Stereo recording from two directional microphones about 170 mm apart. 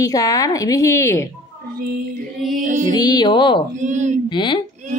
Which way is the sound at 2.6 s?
50° right (ahead or behind).